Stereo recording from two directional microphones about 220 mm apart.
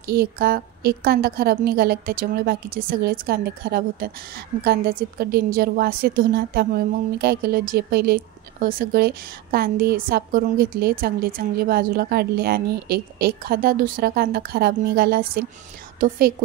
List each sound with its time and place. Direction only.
0.0 s a woman's voice: 45° right (ahead or behind)